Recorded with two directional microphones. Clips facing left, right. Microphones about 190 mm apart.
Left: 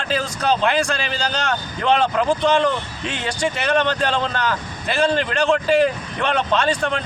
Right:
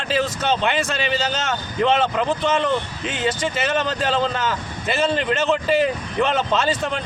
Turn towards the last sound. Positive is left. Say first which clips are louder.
# left 1 dB
turn(degrees=-5)  # may be behind; listen again after turning